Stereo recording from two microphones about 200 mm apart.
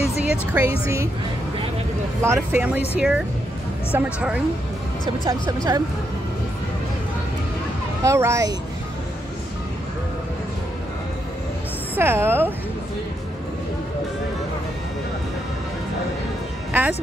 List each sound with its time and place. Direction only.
0.0 s speech: 5° right (ahead or behind)
2.2 s speech: 10° right (ahead or behind)
5.2 s speech: 20° right (ahead or behind)
8.0 s speech: 15° right (ahead or behind)
11.9 s speech: 10° right (ahead or behind)